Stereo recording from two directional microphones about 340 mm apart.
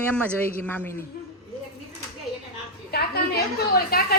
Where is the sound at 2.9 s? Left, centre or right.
Left.